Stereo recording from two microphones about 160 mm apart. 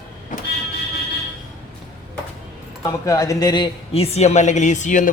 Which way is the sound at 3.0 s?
20° left (ahead or behind).